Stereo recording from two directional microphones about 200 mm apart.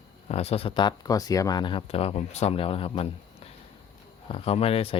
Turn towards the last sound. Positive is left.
turn(degrees=30)  # may be behind; listen again after turning